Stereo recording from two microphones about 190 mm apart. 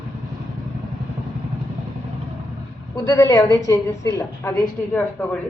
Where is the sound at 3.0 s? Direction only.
15° left (ahead or behind).